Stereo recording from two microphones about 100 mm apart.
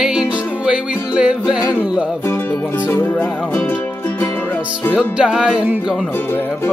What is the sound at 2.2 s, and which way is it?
Music, 25° left (ahead or behind).